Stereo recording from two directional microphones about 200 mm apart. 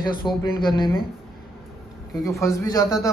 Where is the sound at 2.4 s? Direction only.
15° left (ahead or behind).